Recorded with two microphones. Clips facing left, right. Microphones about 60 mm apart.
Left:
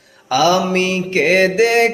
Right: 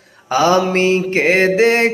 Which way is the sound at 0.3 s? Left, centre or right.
Right.